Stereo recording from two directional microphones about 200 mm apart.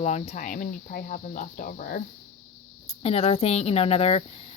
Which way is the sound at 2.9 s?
30° left (ahead or behind).